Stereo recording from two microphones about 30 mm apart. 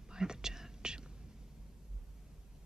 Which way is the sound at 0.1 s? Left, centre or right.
Right.